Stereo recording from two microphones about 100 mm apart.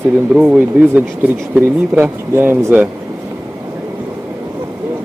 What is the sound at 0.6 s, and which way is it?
Speech, 15° right (ahead or behind).